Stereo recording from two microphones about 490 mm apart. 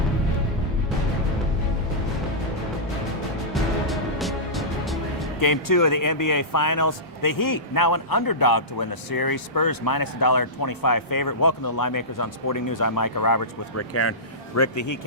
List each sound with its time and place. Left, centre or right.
3.5 s music: centre
5.4 s speech: left
13.9 s speech: left